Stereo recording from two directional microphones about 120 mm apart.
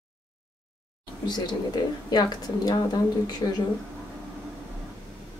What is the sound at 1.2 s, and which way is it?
Speech, 35° left (ahead or behind).